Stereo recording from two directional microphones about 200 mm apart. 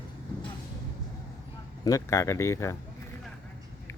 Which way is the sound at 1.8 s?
15° left (ahead or behind).